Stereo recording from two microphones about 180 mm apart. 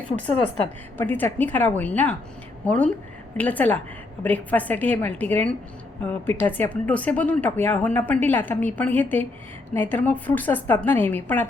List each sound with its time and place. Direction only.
0.9 s speech: 10° left (ahead or behind)